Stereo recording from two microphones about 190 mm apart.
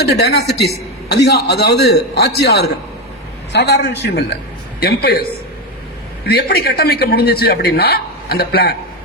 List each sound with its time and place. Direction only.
0.0 s a man's voice: 60° left (ahead or behind)